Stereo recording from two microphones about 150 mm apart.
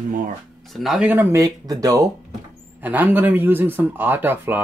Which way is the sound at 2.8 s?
10° right (ahead or behind).